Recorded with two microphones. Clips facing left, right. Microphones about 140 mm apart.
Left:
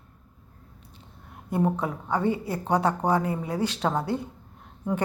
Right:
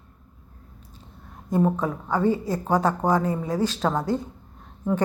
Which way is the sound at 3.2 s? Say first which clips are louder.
Right 3 dB; 35° right (ahead or behind).